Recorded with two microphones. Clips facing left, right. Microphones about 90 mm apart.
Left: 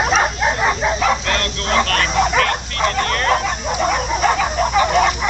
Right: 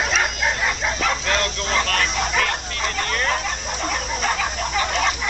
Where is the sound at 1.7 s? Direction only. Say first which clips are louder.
Left 6 dB; 60° left (ahead or behind).